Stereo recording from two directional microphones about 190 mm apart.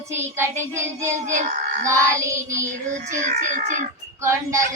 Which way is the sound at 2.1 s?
15° right (ahead or behind).